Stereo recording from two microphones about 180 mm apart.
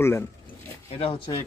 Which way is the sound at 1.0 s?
30° left (ahead or behind).